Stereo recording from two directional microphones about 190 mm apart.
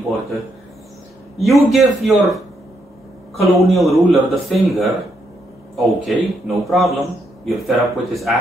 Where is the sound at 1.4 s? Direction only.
Centre (ahead or behind).